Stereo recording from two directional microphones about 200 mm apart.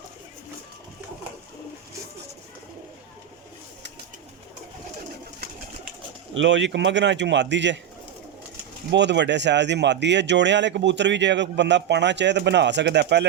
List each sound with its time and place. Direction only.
6.3 s speech: 65° right (ahead or behind)
8.9 s speech: 60° right (ahead or behind)